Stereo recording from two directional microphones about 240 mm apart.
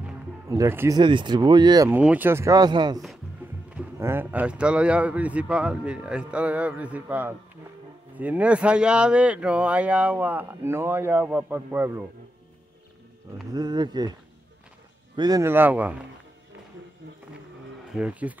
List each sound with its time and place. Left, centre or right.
0.0 s speech: centre
13.5 s speech: centre
15.1 s speech: centre
17.9 s speech: centre